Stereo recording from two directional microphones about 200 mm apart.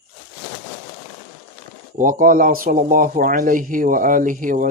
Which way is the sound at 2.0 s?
45° right (ahead or behind).